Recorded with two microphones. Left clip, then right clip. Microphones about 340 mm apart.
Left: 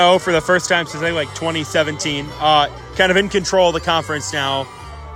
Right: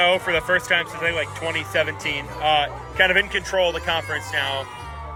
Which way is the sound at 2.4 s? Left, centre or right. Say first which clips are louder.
Left 6 dB; left.